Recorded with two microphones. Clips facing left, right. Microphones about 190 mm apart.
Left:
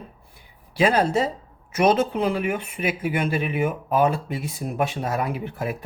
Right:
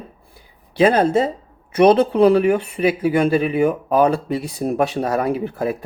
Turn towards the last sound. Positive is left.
turn(degrees=-35)  # may be behind; listen again after turning